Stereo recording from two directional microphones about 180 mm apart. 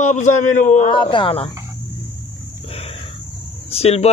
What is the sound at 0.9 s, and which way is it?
Speech, 25° left (ahead or behind).